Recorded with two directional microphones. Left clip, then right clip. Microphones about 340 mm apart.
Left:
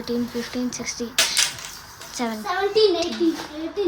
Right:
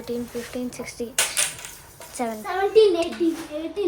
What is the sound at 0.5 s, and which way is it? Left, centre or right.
Speech, centre.